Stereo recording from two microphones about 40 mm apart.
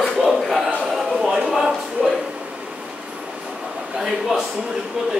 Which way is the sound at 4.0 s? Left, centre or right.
Centre.